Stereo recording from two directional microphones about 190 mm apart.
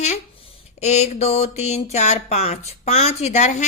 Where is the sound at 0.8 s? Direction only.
35° left (ahead or behind).